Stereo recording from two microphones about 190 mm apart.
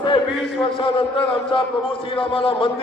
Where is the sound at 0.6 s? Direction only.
25° left (ahead or behind).